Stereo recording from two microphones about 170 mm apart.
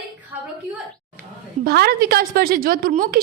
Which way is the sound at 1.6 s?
65° right (ahead or behind).